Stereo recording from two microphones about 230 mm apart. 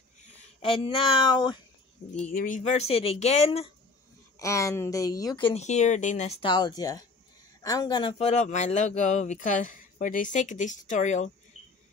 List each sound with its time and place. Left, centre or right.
0.6 s speech: left
2.3 s speech: left
4.4 s speech: centre; by 11.2 s left